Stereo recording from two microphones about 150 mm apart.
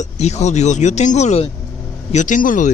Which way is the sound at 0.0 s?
50° left (ahead or behind).